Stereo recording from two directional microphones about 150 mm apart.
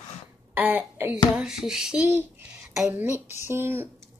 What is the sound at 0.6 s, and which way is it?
Speech, 10° right (ahead or behind).